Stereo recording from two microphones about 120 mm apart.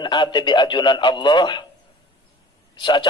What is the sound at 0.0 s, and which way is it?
A man's voice, 40° left (ahead or behind).